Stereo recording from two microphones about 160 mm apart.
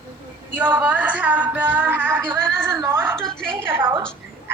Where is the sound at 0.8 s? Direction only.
10° right (ahead or behind).